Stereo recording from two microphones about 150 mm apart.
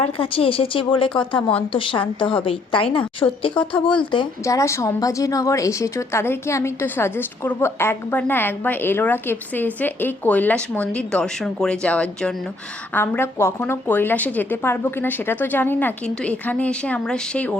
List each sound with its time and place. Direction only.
0.0 s a woman's voice: 35° left (ahead or behind)
4.4 s a woman's voice: 20° left (ahead or behind)